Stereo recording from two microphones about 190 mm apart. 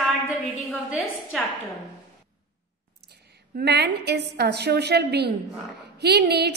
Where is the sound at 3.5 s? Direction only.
60° right (ahead or behind).